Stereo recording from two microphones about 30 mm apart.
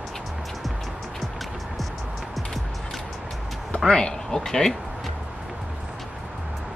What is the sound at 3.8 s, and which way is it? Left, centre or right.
Speech, left.